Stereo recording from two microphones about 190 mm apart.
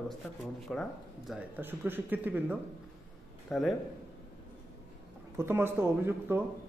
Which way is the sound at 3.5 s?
Centre (ahead or behind).